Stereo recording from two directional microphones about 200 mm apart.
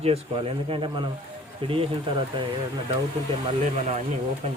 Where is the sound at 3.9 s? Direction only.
35° right (ahead or behind).